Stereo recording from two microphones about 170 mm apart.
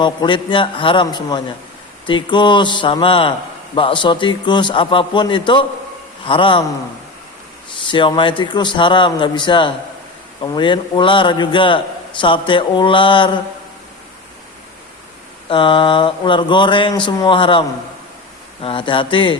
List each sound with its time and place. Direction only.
0.0 s speech: 30° left (ahead or behind)
7.9 s speech: 30° left (ahead or behind)
15.4 s speech: 30° left (ahead or behind)